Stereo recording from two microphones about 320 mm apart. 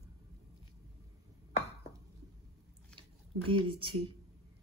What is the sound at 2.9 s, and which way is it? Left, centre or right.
Speech, centre.